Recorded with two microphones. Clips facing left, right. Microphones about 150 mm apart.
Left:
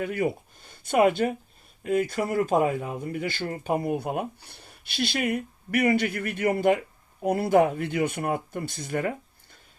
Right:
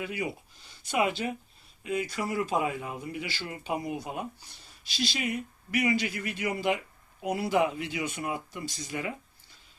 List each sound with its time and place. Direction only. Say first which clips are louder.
0.0 s speech: left 7 dB; 50° left (ahead or behind)